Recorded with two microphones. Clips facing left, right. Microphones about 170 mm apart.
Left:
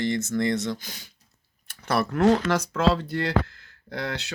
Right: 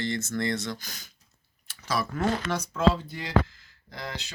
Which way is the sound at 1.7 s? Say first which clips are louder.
Left 5 dB; 60° left (ahead or behind).